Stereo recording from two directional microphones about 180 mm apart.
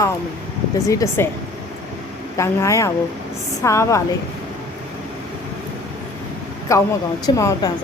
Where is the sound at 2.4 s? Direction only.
15° left (ahead or behind).